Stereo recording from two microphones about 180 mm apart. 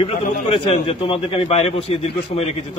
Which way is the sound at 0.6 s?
30° left (ahead or behind).